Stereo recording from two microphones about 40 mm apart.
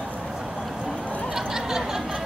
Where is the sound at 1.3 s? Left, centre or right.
Centre.